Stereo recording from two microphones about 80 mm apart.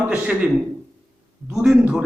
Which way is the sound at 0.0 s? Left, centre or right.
Right.